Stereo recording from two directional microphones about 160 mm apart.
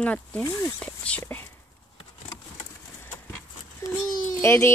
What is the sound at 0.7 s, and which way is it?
Speech, 5° left (ahead or behind).